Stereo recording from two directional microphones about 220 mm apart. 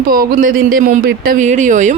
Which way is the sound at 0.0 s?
40° right (ahead or behind).